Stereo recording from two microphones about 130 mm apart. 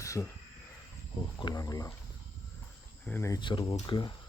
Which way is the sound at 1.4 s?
30° left (ahead or behind).